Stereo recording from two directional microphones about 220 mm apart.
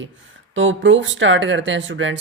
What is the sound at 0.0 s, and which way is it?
Speech, 60° right (ahead or behind).